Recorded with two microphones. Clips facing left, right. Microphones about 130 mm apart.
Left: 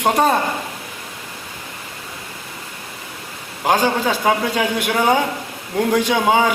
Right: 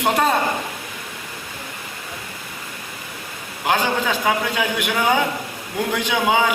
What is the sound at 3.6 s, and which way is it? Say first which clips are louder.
A man's voice: left 3 dB; 35° left (ahead or behind).